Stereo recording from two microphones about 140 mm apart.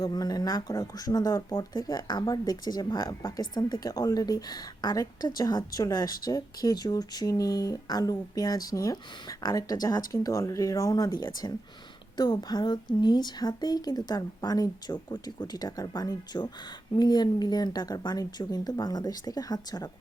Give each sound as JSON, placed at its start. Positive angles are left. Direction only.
{"t": 0.0, "sound": "speech", "side_deg": 30}